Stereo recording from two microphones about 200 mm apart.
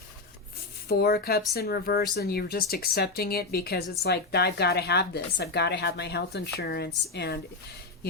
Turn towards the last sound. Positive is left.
turn(degrees=55)  # may be behind; listen again after turning